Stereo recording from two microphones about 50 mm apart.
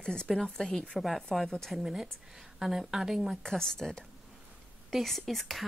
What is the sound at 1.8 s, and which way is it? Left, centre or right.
Speech, centre.